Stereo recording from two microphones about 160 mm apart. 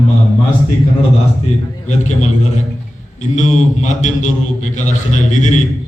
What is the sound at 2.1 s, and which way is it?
A man's voice, 50° left (ahead or behind).